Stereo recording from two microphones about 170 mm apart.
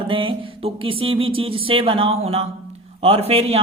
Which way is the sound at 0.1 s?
30° right (ahead or behind).